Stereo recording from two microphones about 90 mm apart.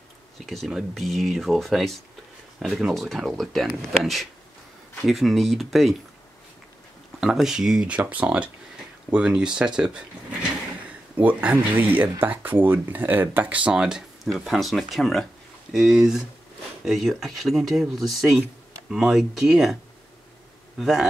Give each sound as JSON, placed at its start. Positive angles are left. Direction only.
{"t": 0.5, "sound": "speech", "side_deg": 0}
{"t": 7.2, "sound": "speech", "side_deg": -5}
{"t": 11.1, "sound": "speech", "side_deg": -15}